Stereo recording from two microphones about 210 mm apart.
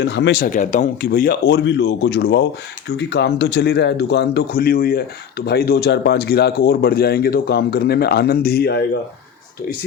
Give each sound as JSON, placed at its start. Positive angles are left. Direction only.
{"t": 0.0, "sound": "speech", "side_deg": 60}